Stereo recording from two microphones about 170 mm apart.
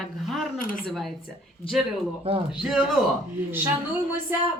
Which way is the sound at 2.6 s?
5° right (ahead or behind).